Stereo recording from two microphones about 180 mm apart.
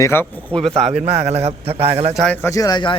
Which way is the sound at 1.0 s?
35° right (ahead or behind).